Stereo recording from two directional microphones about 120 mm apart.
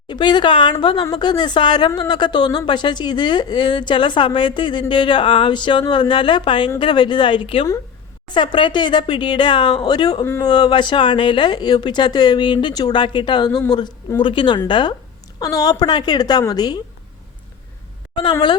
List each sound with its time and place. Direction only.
0.1 s speech: 40° left (ahead or behind)
18.1 s speech: 40° left (ahead or behind)